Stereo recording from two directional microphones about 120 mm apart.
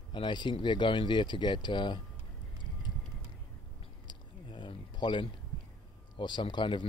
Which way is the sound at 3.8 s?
45° left (ahead or behind).